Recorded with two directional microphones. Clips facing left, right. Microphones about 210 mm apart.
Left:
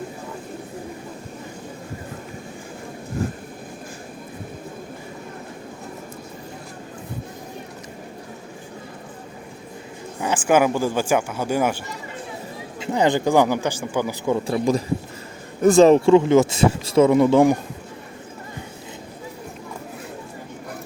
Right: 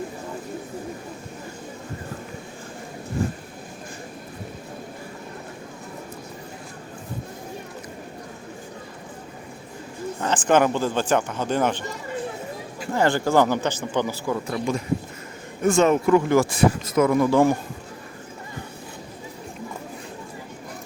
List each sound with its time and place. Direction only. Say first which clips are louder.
10.2 s speech: left 1 dB; 10° left (ahead or behind)
14.3 s speech: left 5 dB; 25° left (ahead or behind)